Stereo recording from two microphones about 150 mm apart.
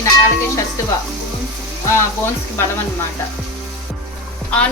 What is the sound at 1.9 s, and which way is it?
Speech, 15° left (ahead or behind).